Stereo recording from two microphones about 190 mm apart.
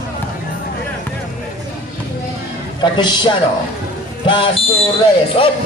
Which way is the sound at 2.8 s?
25° left (ahead or behind).